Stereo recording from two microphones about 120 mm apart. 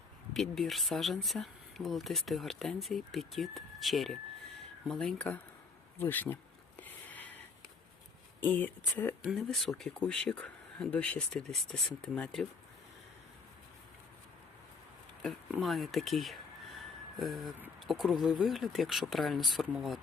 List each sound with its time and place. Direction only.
0.3 s speech: centre (ahead or behind)
7.1 s a sound: 15° left (ahead or behind)
8.4 s speech: 15° left (ahead or behind)
9.3 s speech: 5° left (ahead or behind)
15.5 s speech: centre (ahead or behind)